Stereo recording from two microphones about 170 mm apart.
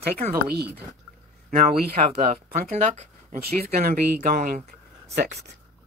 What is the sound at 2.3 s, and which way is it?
Speech, 45° right (ahead or behind).